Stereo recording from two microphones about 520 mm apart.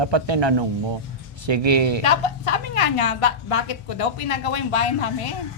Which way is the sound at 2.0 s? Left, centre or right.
Left.